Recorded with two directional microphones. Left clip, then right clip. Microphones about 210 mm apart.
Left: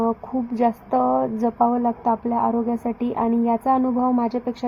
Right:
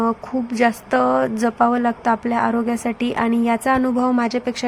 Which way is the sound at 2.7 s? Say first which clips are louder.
Right 3 dB; 15° right (ahead or behind).